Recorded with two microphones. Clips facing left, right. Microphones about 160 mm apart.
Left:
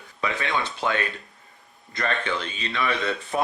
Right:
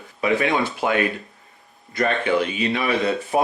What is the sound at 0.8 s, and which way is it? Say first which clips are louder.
Speech: right 3 dB; 45° right (ahead or behind).